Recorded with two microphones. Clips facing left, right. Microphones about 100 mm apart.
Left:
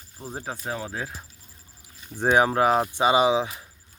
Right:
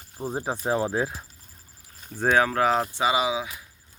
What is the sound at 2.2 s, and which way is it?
Speech, 15° left (ahead or behind).